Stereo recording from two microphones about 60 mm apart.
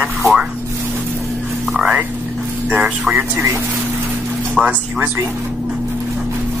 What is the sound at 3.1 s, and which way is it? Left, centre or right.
Speech, right.